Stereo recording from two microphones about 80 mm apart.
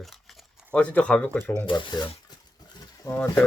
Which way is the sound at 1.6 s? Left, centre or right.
Left.